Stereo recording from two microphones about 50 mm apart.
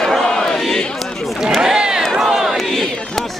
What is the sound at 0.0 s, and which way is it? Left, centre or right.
Crowd, centre.